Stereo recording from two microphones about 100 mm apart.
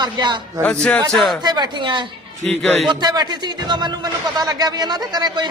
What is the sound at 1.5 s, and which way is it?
A man's voice, 45° right (ahead or behind).